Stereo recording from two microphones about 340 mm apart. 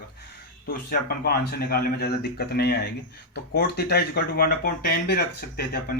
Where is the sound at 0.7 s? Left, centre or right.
Left.